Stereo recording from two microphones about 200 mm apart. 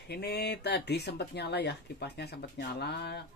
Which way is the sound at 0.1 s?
55° left (ahead or behind).